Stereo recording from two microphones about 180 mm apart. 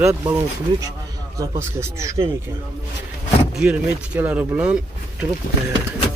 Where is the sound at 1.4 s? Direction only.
15° right (ahead or behind).